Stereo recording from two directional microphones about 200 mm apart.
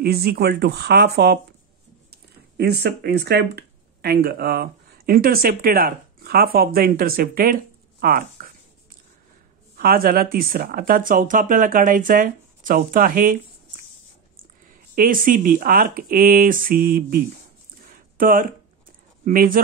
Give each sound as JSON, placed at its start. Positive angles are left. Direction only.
{"t": 0.0, "sound": "speech", "side_deg": -50}
{"t": 9.8, "sound": "speech", "side_deg": -45}
{"t": 17.8, "sound": "a sound", "side_deg": -45}
{"t": 19.2, "sound": "speech", "side_deg": -45}